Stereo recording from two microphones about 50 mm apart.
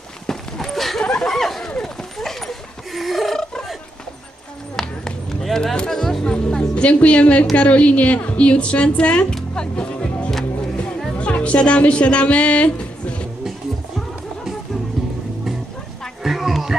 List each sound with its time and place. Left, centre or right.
0.3 s a sound: centre
1.0 s a sound: centre
4.7 s run: centre
5.9 s music: centre
6.3 s a sound: centre
7.5 s speech: left
9.3 s music: centre
11.1 s speech: left
16.2 s music: centre